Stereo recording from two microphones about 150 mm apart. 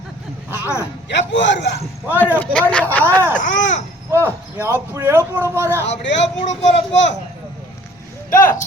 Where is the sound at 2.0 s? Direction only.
15° left (ahead or behind).